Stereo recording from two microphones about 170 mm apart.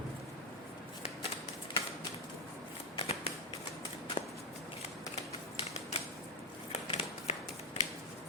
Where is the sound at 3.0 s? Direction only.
35° left (ahead or behind).